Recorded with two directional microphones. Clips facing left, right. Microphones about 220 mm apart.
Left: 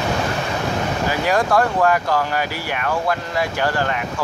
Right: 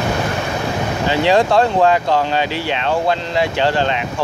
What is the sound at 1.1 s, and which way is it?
Speech, 25° right (ahead or behind).